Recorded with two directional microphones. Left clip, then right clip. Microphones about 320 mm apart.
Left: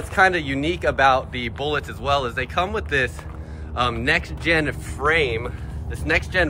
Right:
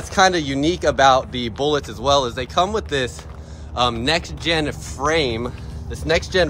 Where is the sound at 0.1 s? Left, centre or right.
Centre.